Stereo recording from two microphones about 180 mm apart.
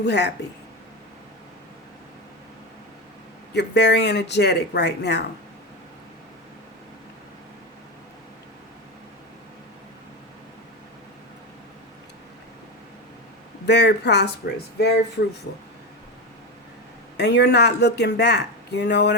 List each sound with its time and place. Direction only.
0.0 s speech: 70° left (ahead or behind)
3.5 s speech: 70° left (ahead or behind)
13.7 s speech: 70° left (ahead or behind)
17.2 s speech: 70° left (ahead or behind)